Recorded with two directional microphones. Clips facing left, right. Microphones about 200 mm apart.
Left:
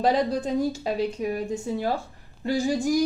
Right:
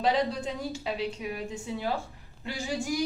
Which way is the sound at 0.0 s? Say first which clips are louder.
Left 4 dB; 45° left (ahead or behind).